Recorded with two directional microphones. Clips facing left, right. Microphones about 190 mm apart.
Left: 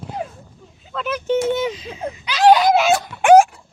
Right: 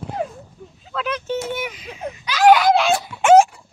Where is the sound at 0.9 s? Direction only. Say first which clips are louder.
Left 1 dB; 5° left (ahead or behind).